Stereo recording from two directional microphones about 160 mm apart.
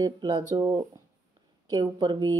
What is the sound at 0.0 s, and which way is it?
Speech, 25° right (ahead or behind).